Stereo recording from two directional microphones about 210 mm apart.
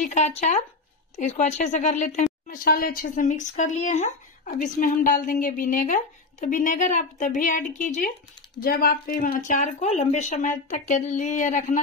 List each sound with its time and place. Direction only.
0.0 s a woman's voice: 35° left (ahead or behind)